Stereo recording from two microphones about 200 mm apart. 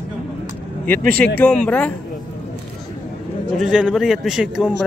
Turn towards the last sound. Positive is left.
turn(degrees=-5)  # may be behind; listen again after turning